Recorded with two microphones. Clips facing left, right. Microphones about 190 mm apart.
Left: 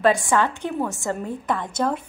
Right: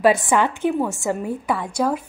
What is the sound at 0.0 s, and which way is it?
A woman's voice, 15° right (ahead or behind).